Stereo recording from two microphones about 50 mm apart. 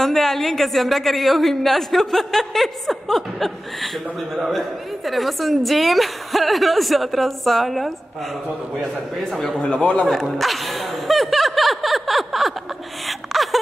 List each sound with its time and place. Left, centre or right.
0.0 s speech: centre
9.6 s a man's voice: centre
10.2 s speech: centre
13.0 s a sound: centre